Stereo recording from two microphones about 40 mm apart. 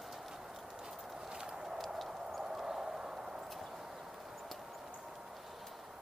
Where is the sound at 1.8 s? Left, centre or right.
Centre.